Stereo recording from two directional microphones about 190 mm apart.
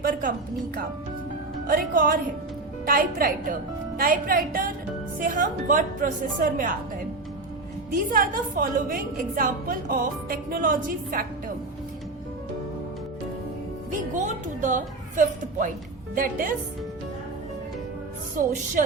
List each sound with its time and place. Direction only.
0.0 s music: 50° right (ahead or behind)
1.6 s a woman's voice: 50° right (ahead or behind)
8.1 s a woman's voice: 45° right (ahead or behind)
13.9 s music: 40° right (ahead or behind)
16.1 s a woman's voice: 45° right (ahead or behind)